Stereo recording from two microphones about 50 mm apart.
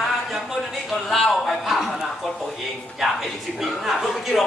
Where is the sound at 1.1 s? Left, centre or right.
Centre.